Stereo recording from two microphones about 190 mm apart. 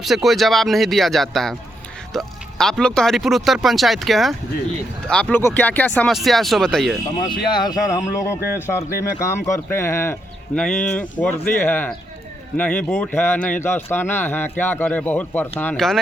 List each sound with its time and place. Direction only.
0.0 s speech: centre (ahead or behind)
7.3 s a man's voice: 20° left (ahead or behind); by 16.0 s 5° left (ahead or behind)